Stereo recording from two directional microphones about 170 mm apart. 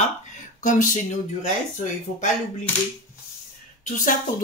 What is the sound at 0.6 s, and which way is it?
Speech, 50° left (ahead or behind).